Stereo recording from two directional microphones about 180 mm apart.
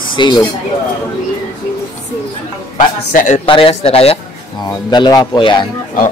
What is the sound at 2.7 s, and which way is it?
Speech, 45° left (ahead or behind).